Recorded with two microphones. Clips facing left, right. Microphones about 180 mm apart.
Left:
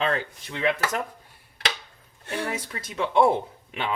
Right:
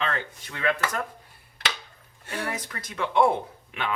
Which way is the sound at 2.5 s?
25° left (ahead or behind).